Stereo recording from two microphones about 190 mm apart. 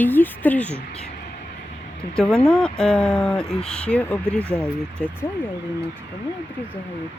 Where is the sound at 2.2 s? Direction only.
5° left (ahead or behind).